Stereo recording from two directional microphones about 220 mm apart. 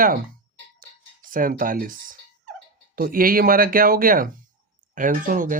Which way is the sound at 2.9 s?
40° right (ahead or behind).